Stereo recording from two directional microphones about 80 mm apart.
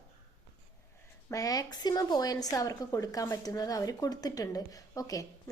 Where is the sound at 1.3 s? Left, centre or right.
Left.